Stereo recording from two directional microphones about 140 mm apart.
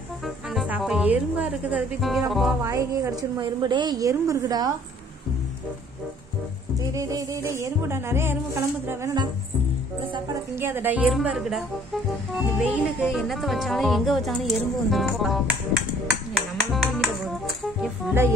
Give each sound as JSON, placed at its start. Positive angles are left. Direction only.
{"t": 0.7, "sound": "music", "side_deg": -5}
{"t": 2.0, "sound": "speech", "side_deg": 0}
{"t": 2.6, "sound": "speech", "side_deg": -25}
{"t": 6.9, "sound": "speech", "side_deg": -25}
{"t": 10.5, "sound": "speech", "side_deg": -15}
{"t": 11.1, "sound": "speech", "side_deg": 0}
{"t": 16.3, "sound": "music", "side_deg": 0}